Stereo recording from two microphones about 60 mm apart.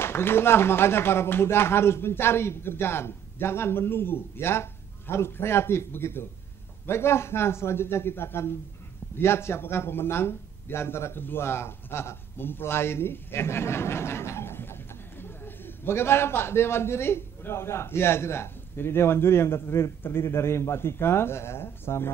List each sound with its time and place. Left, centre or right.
0.0 s speech: left